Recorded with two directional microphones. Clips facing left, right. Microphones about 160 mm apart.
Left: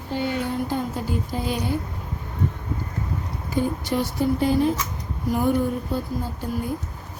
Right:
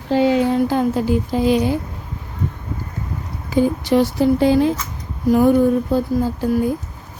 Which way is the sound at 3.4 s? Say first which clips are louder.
Right 8 dB; 90° right.